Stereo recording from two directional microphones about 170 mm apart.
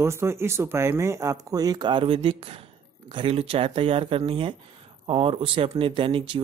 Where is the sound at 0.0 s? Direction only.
15° right (ahead or behind).